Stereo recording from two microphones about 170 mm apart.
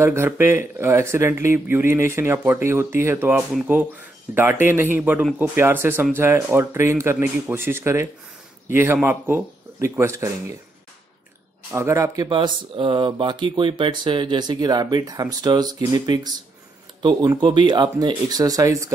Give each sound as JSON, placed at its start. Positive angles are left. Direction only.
{"t": 0.0, "sound": "speech", "side_deg": -15}
{"t": 11.7, "sound": "speech", "side_deg": -15}
{"t": 12.2, "sound": "speech", "side_deg": -30}